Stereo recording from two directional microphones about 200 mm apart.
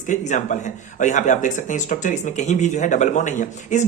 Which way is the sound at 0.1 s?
40° left (ahead or behind).